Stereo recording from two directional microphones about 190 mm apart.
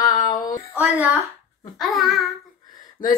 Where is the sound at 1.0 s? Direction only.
10° right (ahead or behind).